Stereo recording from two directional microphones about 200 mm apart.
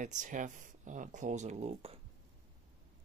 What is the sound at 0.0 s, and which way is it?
Speech, 40° right (ahead or behind).